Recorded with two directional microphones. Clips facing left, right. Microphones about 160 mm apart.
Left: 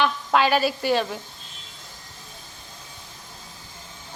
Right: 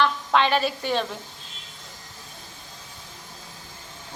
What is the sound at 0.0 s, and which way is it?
Speech, 5° left (ahead or behind).